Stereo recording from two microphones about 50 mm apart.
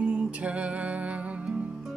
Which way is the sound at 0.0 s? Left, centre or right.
Right.